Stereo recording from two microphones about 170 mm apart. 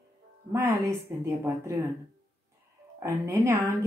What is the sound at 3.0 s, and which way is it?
Speech, 15° right (ahead or behind).